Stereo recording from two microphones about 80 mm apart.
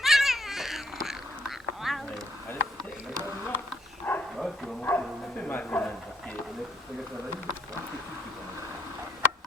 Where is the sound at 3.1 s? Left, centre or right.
Right.